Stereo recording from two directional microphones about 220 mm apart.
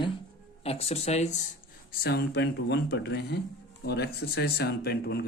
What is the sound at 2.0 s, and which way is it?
Speech, 50° left (ahead or behind).